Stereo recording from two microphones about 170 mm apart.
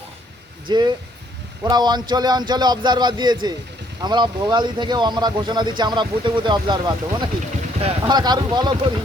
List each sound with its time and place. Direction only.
0.7 s speech: 25° right (ahead or behind)